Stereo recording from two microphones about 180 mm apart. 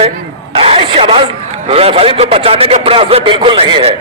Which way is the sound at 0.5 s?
30° right (ahead or behind).